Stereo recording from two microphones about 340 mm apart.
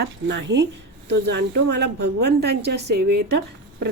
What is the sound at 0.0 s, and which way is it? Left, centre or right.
Speech, right.